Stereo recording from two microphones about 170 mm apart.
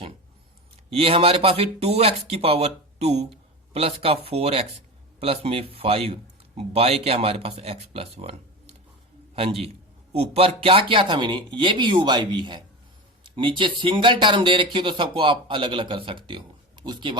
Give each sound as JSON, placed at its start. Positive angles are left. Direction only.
{"t": 0.9, "sound": "a man's voice", "side_deg": -35}